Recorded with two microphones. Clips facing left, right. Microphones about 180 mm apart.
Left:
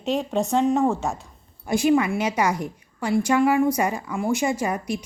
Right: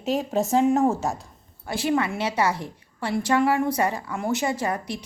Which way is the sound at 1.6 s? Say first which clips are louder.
Left 5 dB; 15° left (ahead or behind).